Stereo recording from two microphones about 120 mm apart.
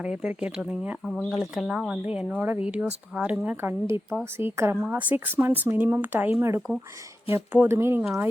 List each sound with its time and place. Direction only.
0.0 s speech: 10° right (ahead or behind)